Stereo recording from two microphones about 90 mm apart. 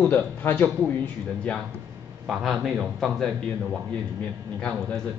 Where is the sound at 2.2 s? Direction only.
5° right (ahead or behind).